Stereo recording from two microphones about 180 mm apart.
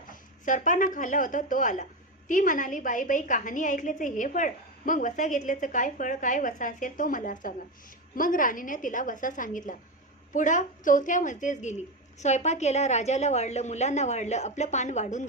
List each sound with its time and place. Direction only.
0.1 s a woman's voice: 45° left (ahead or behind)